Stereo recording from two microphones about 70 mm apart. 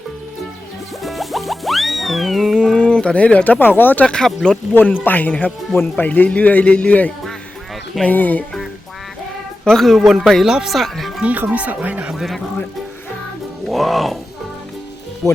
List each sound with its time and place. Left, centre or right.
1.0 s music: centre
2.6 s speech: centre
4.0 s speech: centre
5.0 s speech: left
9.6 s speech: centre
11.2 s speech: right
12.1 s speech: centre
13.7 s music: centre